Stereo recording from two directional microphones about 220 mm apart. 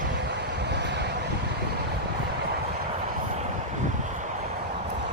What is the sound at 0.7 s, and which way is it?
Vehicle, 50° right (ahead or behind).